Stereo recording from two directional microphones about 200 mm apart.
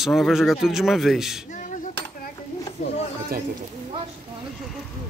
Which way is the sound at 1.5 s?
40° left (ahead or behind).